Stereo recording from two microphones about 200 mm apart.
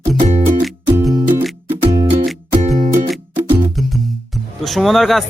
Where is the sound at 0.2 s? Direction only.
35° right (ahead or behind).